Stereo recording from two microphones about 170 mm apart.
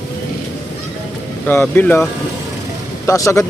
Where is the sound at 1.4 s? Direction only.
10° left (ahead or behind).